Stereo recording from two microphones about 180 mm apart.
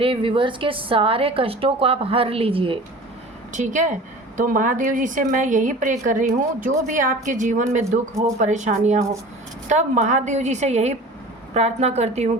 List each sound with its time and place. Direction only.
0.0 s a woman's voice: 30° right (ahead or behind)
3.5 s a woman's voice: 45° right (ahead or behind)